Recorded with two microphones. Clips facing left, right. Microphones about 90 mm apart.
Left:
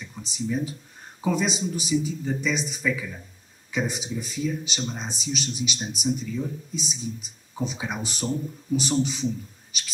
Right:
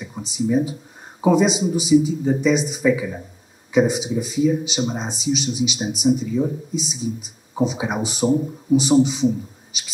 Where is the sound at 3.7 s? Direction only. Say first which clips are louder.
Right 10 dB; 5° right (ahead or behind).